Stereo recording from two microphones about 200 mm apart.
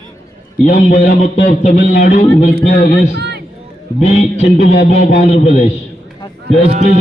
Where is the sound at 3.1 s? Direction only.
55° right (ahead or behind).